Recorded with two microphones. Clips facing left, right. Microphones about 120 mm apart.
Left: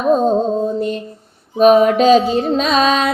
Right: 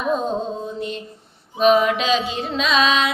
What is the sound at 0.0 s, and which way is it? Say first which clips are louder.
Music: left 8 dB; 40° left (ahead or behind).